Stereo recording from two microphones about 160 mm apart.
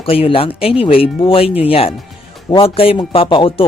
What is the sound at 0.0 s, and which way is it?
Speech, 35° left (ahead or behind).